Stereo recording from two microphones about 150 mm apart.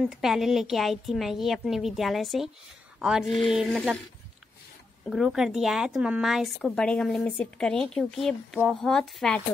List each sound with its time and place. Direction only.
0.0 s speech: centre (ahead or behind)
5.1 s speech: centre (ahead or behind)